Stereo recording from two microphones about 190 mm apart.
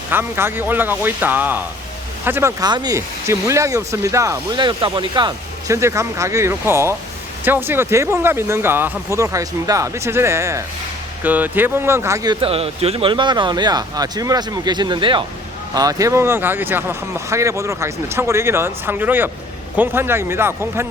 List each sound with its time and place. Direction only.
0.1 s speech: 10° right (ahead or behind)